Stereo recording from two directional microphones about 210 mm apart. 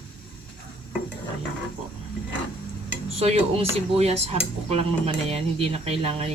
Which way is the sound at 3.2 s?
30° right (ahead or behind).